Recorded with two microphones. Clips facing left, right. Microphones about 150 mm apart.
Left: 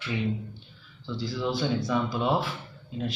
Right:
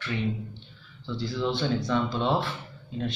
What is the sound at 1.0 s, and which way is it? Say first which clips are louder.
A man's voice: right 1 dB; centre (ahead or behind).